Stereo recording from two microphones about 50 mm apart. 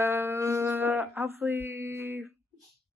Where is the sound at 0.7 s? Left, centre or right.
Right.